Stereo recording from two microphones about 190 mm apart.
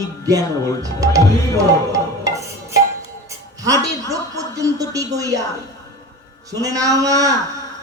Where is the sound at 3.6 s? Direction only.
20° right (ahead or behind).